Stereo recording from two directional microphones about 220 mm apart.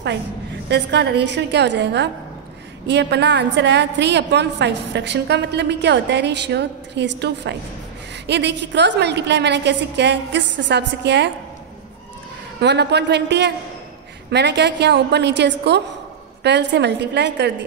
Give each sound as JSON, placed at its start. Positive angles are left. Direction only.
{"t": 0.7, "sound": "a woman's voice", "side_deg": -50}
{"t": 12.5, "sound": "a woman's voice", "side_deg": -50}